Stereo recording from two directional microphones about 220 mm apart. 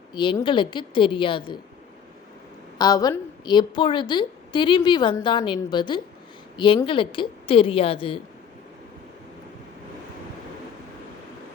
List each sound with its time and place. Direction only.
0.1 s a woman's voice: 20° left (ahead or behind)
2.7 s a woman's voice: 15° left (ahead or behind)